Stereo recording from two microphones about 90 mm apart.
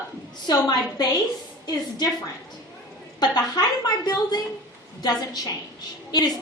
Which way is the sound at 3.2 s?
50° left (ahead or behind).